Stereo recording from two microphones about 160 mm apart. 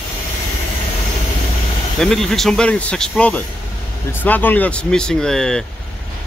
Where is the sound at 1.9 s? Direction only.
5° left (ahead or behind).